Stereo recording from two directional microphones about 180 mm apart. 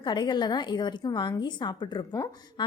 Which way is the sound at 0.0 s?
25° left (ahead or behind).